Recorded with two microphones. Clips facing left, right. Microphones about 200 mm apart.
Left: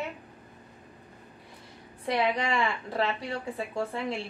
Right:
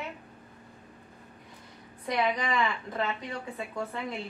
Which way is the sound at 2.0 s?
30° left (ahead or behind).